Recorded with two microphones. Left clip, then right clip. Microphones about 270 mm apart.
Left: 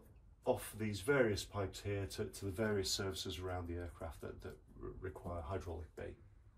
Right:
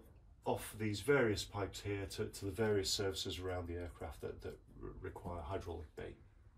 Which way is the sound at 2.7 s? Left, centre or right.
Centre.